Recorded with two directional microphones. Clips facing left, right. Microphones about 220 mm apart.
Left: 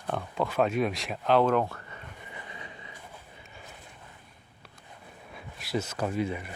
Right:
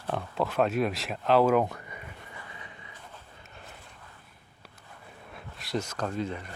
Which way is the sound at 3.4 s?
Centre (ahead or behind).